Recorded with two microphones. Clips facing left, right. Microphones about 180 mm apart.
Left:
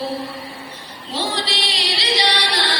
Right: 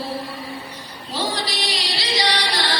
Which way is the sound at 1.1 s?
25° left (ahead or behind).